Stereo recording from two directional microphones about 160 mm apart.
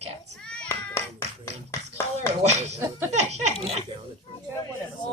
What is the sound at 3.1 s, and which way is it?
Laughter, 45° right (ahead or behind).